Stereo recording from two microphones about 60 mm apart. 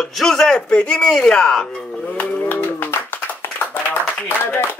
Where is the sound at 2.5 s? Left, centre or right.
Left.